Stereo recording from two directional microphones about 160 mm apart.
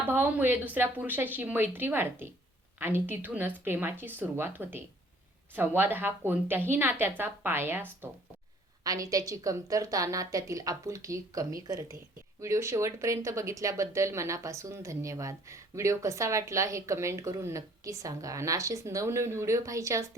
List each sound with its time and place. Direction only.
0.1 s a woman's voice: 15° right (ahead or behind)